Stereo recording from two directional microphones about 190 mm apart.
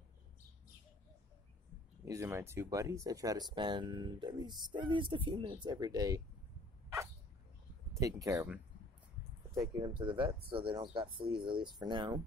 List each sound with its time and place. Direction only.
2.0 s speech: 15° right (ahead or behind)
8.0 s speech: 15° right (ahead or behind)